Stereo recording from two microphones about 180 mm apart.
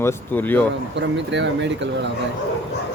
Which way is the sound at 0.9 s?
80° right.